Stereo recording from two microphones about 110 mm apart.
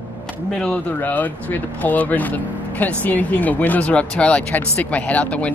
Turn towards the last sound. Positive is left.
turn(degrees=10)  # may be behind; listen again after turning